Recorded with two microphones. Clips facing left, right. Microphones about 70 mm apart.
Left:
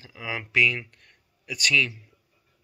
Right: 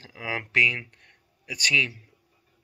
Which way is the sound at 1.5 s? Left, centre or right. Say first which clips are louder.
Left 1 dB; right.